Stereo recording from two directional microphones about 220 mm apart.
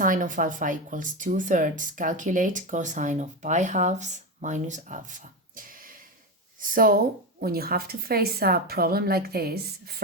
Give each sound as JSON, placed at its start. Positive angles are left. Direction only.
{"t": 0.0, "sound": "a woman's voice", "side_deg": -35}